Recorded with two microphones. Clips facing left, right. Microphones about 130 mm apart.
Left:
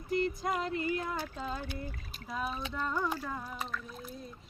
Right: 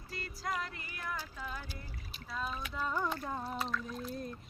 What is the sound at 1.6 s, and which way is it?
Speech, 60° left (ahead or behind).